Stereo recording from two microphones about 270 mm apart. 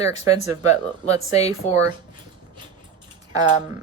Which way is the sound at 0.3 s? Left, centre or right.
Centre.